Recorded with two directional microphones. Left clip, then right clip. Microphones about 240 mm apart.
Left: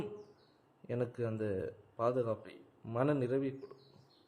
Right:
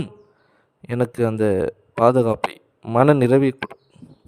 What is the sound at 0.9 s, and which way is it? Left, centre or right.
Speech, right.